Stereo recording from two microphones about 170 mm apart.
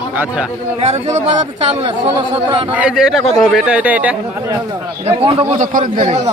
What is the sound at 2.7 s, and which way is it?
Speech, 10° right (ahead or behind).